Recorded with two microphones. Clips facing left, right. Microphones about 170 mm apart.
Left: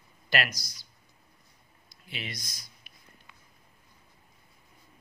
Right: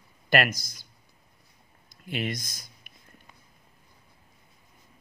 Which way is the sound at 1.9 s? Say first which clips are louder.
Right 10 dB; 50° right (ahead or behind).